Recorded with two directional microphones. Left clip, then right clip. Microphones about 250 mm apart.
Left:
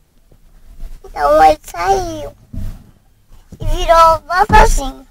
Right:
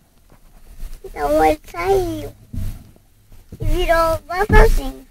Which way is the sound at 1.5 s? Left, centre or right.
Centre.